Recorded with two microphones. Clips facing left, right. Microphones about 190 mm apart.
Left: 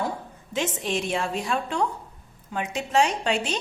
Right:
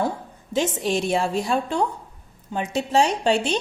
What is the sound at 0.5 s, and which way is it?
Speech, 35° right (ahead or behind).